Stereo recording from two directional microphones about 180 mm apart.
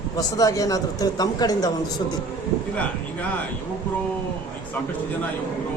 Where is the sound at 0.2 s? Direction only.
20° left (ahead or behind).